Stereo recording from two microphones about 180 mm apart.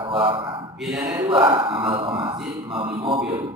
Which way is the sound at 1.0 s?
20° right (ahead or behind).